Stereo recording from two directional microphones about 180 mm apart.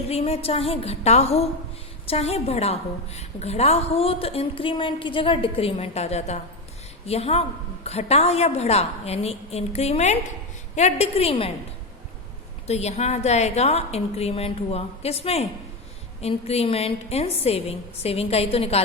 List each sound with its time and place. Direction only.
0.1 s a woman's voice: 35° left (ahead or behind)
12.6 s a woman's voice: 35° left (ahead or behind)